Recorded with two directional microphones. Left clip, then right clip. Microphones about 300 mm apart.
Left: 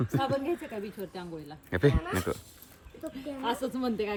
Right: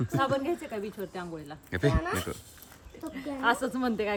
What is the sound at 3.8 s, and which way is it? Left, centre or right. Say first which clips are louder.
Speech: right 2 dB; centre.